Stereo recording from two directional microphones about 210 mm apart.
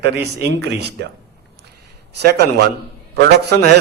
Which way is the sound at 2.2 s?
50° right (ahead or behind).